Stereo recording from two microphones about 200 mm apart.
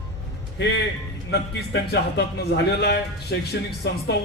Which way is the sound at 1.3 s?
55° left (ahead or behind).